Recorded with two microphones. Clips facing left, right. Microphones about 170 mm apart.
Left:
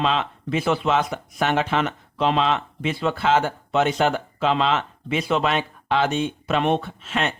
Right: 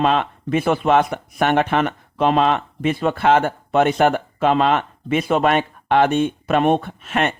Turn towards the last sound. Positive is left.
turn(degrees=-55)  # may be behind; listen again after turning